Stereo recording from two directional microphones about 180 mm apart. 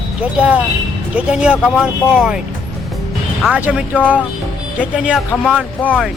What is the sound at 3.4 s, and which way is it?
Speech, 5° right (ahead or behind).